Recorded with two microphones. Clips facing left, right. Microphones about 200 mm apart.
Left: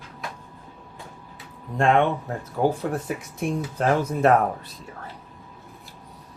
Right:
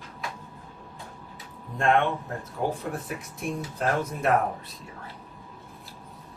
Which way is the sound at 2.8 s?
Centre (ahead or behind).